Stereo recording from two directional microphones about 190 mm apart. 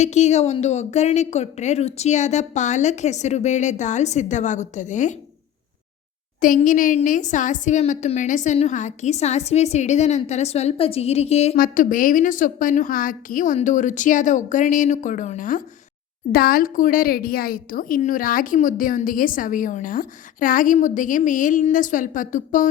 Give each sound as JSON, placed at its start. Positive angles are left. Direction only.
{"t": 0.0, "sound": "a woman's voice", "side_deg": 35}
{"t": 6.4, "sound": "a woman's voice", "side_deg": 45}
{"t": 11.5, "sound": "a woman's voice", "side_deg": 45}